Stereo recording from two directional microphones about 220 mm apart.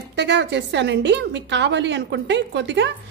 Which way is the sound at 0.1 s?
50° right (ahead or behind).